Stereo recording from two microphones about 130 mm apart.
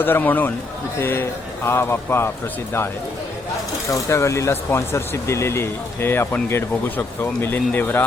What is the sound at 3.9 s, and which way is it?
Speech, 20° left (ahead or behind).